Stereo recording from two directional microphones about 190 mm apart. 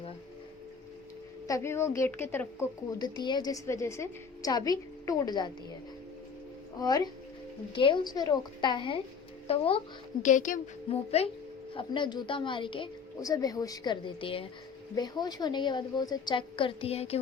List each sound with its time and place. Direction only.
1.5 s a woman's voice: 15° left (ahead or behind)
6.7 s a woman's voice: 20° left (ahead or behind)
10.2 s speech: 45° left (ahead or behind)
10.9 s a woman's voice: 30° left (ahead or behind)